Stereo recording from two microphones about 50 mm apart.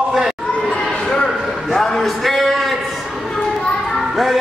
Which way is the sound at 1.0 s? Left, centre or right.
Centre.